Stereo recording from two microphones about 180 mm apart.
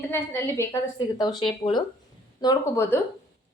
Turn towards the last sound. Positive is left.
turn(degrees=15)  # may be behind; listen again after turning